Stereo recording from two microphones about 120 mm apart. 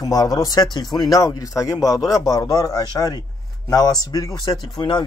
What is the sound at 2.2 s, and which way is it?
Speech, 30° left (ahead or behind).